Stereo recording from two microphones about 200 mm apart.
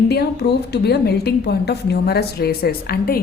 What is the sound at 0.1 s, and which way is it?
A woman's voice, 55° left (ahead or behind).